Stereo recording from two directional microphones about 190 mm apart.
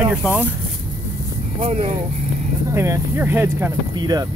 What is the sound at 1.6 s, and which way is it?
Speech, 35° right (ahead or behind).